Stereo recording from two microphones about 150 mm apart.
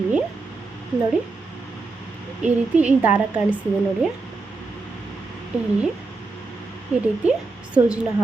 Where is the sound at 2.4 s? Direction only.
10° right (ahead or behind).